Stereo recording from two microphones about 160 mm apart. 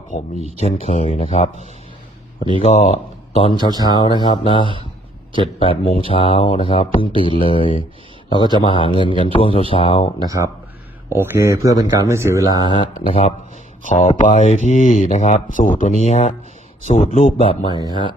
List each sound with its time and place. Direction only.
0.3 s speech: 40° right (ahead or behind)
0.6 s speech: 40° left (ahead or behind)
2.6 s speech: 45° left (ahead or behind)
3.7 s speech: 25° right (ahead or behind)
4.2 s speech: 30° left (ahead or behind)
10.2 s speech: 20° right (ahead or behind)
12.6 s speech: 30° left (ahead or behind)
13.8 s speech: 50° left (ahead or behind); by 18.1 s 30° left (ahead or behind)